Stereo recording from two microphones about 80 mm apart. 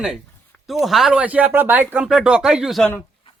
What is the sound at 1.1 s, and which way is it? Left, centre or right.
Speech, centre.